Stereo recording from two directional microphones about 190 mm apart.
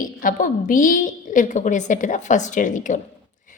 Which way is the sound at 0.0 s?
45° left (ahead or behind).